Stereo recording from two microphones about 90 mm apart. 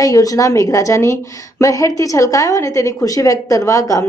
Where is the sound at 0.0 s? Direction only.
40° left (ahead or behind).